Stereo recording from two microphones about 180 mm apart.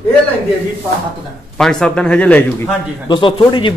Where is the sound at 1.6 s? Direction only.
5° left (ahead or behind).